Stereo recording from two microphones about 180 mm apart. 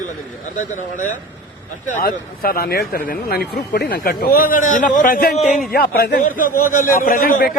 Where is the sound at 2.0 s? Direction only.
55° left (ahead or behind).